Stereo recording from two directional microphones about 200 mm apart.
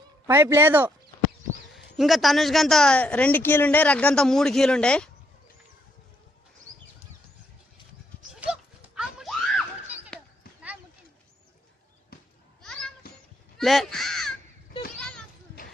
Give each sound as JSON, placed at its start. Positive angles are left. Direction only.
{"t": 0.3, "sound": "a man's voice", "side_deg": -10}
{"t": 9.0, "sound": "screaming", "side_deg": 0}
{"t": 10.1, "sound": "basketball bounce", "side_deg": 5}
{"t": 12.1, "sound": "children playing", "side_deg": 45}
{"t": 12.6, "sound": "cat", "side_deg": 5}
{"t": 13.6, "sound": "crow", "side_deg": 0}
{"t": 14.9, "sound": "children playing", "side_deg": 5}